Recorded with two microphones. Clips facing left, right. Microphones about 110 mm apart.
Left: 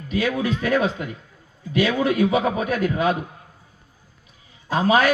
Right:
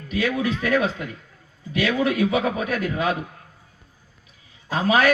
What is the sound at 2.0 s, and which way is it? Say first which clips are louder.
A man's voice: left 2 dB; 35° left (ahead or behind).